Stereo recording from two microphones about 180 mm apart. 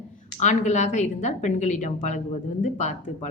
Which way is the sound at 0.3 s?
40° left (ahead or behind).